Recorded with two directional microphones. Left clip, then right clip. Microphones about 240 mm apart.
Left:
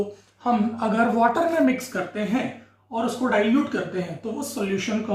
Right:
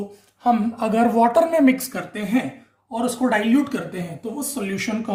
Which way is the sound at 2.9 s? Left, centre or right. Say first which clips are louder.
Right 2 dB; right.